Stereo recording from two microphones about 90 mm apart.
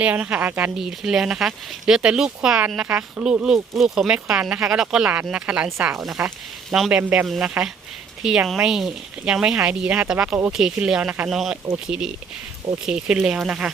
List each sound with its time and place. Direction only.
0.0 s speech: 15° right (ahead or behind)
0.8 s speech: 5° right (ahead or behind)